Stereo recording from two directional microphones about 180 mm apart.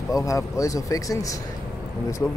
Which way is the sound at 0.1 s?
15° left (ahead or behind).